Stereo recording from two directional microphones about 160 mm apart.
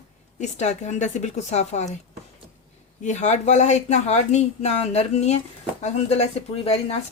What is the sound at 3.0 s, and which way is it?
A woman's voice, 45° left (ahead or behind).